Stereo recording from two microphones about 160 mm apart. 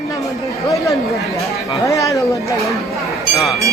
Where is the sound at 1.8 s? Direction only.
20° left (ahead or behind).